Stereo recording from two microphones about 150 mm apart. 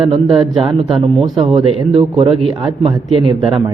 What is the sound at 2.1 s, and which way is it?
Speech, 45° right (ahead or behind).